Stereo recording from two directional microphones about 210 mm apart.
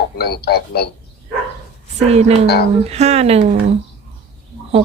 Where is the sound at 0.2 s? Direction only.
50° left (ahead or behind).